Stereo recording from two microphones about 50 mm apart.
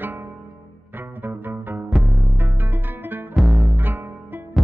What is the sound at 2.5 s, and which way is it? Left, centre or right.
Music, right.